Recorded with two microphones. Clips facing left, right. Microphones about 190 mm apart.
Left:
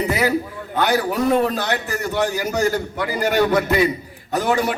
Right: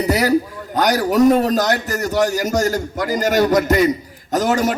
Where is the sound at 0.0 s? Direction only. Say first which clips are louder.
Right 3 dB; 40° right (ahead or behind).